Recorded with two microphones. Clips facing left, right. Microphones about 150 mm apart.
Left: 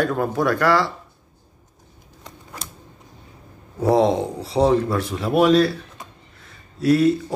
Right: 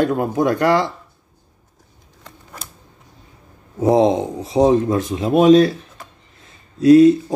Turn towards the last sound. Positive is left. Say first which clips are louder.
# right 8 dB
turn(degrees=-20)  # may be behind; listen again after turning